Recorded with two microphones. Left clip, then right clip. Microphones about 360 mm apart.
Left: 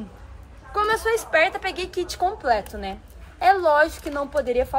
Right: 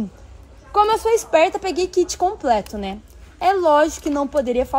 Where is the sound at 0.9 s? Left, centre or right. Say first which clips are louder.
Right 4 dB; centre.